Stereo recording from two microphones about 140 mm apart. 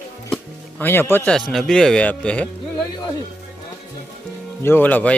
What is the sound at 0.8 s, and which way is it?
Speech, 15° left (ahead or behind).